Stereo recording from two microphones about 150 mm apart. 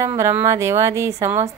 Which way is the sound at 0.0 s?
20° right (ahead or behind).